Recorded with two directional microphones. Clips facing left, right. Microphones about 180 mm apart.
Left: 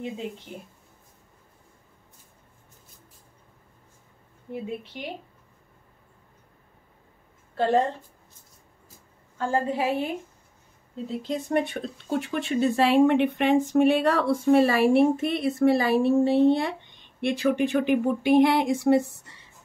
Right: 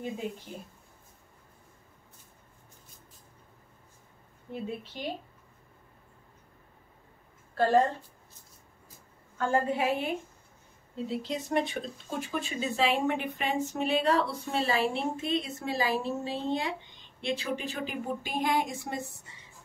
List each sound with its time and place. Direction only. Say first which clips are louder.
0.5 s speech: left 2 dB; 20° left (ahead or behind)
4.5 s a woman's voice: left 3 dB; 15° left (ahead or behind)
7.5 s a woman's voice: left 1 dB; 20° left (ahead or behind)
9.5 s a woman's voice: left 2 dB; 35° left (ahead or behind)
11.1 s speech: left 4 dB; 50° left (ahead or behind); by 19.4 s 70° left (ahead or behind)